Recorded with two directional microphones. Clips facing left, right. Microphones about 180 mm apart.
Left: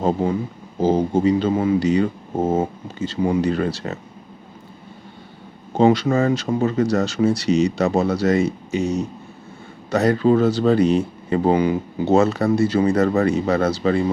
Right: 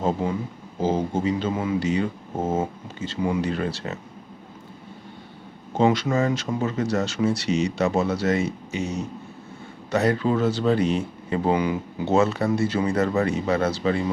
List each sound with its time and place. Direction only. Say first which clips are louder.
0.8 s speech: left 6 dB; 35° left (ahead or behind)
5.7 s speech: left 5 dB; 35° left (ahead or behind)